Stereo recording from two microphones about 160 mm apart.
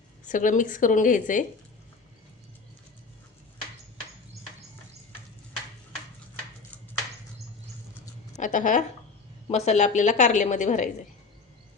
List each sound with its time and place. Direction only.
0.3 s a woman's voice: 55° left (ahead or behind)
8.4 s a woman's voice: 50° left (ahead or behind)